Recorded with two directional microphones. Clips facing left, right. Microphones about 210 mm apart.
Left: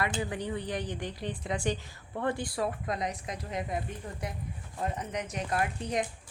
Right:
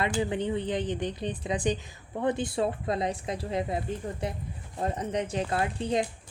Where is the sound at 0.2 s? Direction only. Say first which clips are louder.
Right 5 dB; 25° right (ahead or behind).